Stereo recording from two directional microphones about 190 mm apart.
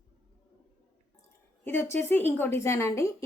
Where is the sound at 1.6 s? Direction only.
10° left (ahead or behind).